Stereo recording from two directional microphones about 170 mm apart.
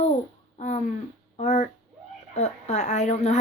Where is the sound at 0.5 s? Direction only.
45° left (ahead or behind).